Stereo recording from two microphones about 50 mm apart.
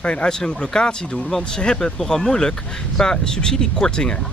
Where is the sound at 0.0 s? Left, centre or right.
Left.